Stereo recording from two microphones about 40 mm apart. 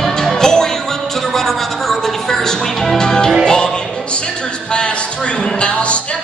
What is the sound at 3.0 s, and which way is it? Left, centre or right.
Music, centre.